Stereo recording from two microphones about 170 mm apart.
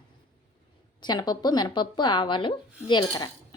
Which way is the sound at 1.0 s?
25° left (ahead or behind).